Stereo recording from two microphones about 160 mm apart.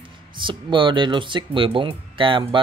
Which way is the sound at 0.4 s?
30° right (ahead or behind).